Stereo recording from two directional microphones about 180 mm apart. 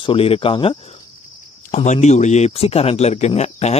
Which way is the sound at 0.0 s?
30° left (ahead or behind).